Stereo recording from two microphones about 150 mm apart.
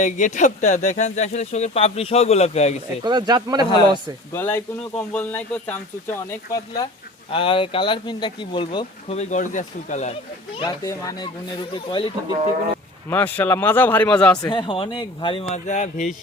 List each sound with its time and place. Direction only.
0.0 s speech: 55° left (ahead or behind)
3.0 s speech: 30° right (ahead or behind)
4.4 s speech: 15° left (ahead or behind)
7.3 s speech: 35° left (ahead or behind)
9.1 s speech: 55° left (ahead or behind)
10.6 s speech: 25° left (ahead or behind)
13.1 s speech: 10° left (ahead or behind)
14.5 s speech: 35° left (ahead or behind); by 16.1 s 55° left (ahead or behind)